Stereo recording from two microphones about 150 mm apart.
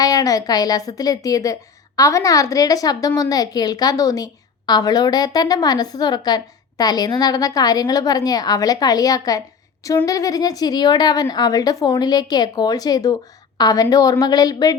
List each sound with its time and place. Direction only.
0.0 s a woman's voice: 25° left (ahead or behind)